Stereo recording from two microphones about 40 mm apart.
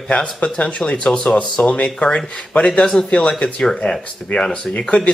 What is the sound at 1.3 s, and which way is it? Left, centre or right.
Speech, left.